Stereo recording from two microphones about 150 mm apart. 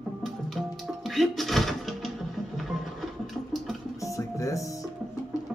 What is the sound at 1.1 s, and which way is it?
Speech, centre (ahead or behind).